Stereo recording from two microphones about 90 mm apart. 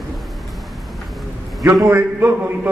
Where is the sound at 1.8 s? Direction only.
25° right (ahead or behind).